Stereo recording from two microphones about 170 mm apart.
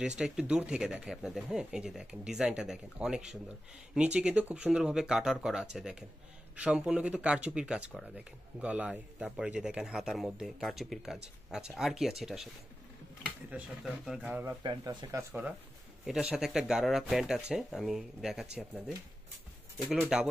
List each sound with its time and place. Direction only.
0.2 s speech: 5° right (ahead or behind)
13.5 s speech: centre (ahead or behind)
14.6 s speech: 25° right (ahead or behind)
16.1 s speech: 5° right (ahead or behind)